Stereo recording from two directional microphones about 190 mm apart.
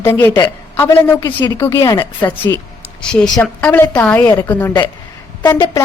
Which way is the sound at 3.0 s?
5° left (ahead or behind).